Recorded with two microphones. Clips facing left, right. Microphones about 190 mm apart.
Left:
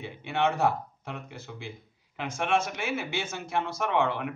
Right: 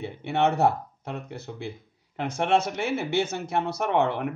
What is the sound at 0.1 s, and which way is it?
A man's voice, 60° right (ahead or behind).